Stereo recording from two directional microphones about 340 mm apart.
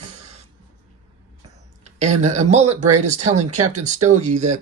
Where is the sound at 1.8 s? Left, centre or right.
Centre.